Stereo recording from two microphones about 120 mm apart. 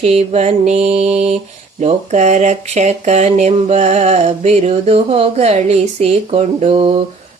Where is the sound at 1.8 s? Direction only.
85° right; by 6.7 s 65° right (ahead or behind).